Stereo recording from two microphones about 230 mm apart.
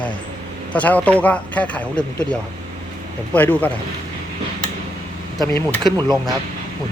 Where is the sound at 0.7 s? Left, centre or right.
Centre.